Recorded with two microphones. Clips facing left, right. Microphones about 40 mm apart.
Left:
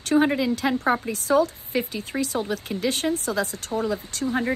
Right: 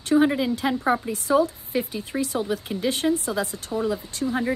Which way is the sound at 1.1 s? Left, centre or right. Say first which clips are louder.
Even; left.